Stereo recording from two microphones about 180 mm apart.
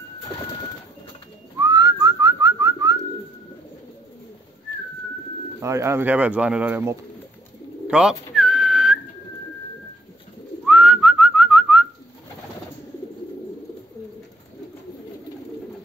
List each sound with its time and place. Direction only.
1.6 s whistling: 20° right (ahead or behind)
5.6 s speech: 15° right (ahead or behind)
7.9 s whistling: 5° right (ahead or behind)
10.6 s whistling: 5° right (ahead or behind)